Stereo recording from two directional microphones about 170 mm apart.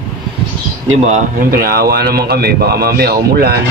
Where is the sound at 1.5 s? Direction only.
65° right (ahead or behind).